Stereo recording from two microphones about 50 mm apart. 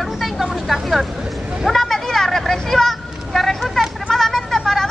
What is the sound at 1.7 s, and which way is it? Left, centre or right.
Vehicle, centre.